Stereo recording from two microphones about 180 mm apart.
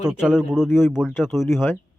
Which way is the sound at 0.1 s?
5° right (ahead or behind).